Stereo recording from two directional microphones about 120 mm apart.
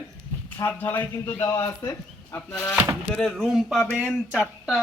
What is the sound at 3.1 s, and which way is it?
A man's voice, centre (ahead or behind).